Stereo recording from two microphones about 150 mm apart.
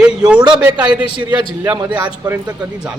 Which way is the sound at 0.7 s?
30° right (ahead or behind).